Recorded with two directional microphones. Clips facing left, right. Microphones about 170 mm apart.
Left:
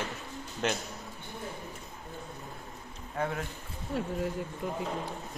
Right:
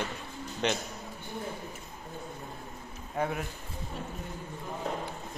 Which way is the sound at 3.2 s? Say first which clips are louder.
Right 1 dB; 15° right (ahead or behind).